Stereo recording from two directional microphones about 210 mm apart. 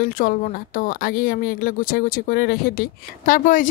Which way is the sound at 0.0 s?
40° left (ahead or behind).